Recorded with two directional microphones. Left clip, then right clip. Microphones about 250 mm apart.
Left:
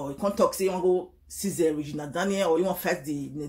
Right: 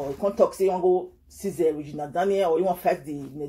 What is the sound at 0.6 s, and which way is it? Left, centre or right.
Speech, centre.